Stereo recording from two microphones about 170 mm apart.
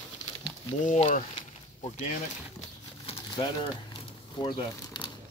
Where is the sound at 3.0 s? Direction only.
25° left (ahead or behind).